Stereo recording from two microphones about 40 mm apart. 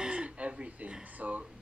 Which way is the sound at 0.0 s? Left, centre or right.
Right.